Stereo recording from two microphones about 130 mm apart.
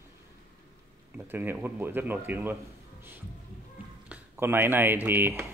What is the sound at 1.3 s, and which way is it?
Speech, 15° right (ahead or behind).